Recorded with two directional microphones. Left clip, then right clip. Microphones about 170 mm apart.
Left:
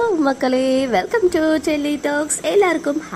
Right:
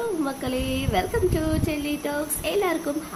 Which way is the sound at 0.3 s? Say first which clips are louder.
Left 11 dB; 40° left (ahead or behind).